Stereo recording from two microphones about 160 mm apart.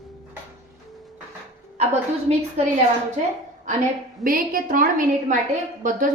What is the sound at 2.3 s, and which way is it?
Speech, 40° right (ahead or behind).